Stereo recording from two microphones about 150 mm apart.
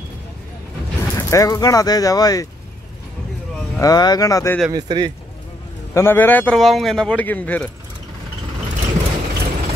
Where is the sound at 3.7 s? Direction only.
25° left (ahead or behind).